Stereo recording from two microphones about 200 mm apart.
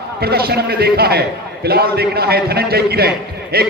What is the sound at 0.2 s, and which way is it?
A man's voice, 50° right (ahead or behind).